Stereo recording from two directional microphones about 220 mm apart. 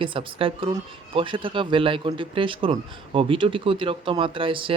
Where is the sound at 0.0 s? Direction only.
25° right (ahead or behind).